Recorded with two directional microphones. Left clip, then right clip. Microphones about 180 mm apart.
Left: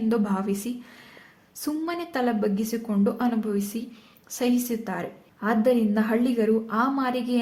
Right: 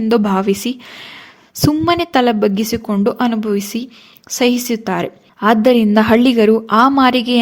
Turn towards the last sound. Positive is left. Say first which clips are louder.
# right 13 dB
turn(degrees=-50)  # may be behind; listen again after turning